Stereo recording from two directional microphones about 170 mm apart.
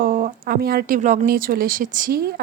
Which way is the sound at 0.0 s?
55° right (ahead or behind).